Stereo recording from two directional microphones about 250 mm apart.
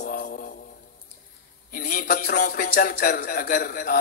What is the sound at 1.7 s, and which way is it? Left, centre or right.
Speech, left.